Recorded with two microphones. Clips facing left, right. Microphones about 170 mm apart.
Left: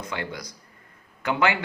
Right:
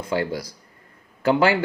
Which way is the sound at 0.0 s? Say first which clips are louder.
Right 8 dB; 30° right (ahead or behind).